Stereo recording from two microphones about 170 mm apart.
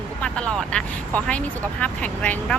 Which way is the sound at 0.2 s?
5° left (ahead or behind).